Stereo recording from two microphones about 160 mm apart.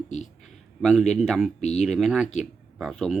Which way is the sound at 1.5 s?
45° left (ahead or behind).